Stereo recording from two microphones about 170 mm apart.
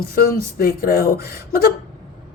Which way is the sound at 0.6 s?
60° left (ahead or behind).